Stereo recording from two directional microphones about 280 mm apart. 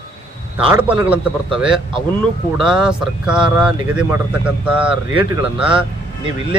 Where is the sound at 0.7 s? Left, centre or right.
Centre.